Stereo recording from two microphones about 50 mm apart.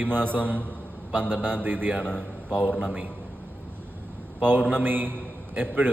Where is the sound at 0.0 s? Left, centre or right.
Right.